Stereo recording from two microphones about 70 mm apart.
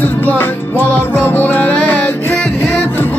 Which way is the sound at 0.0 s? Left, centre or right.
Left.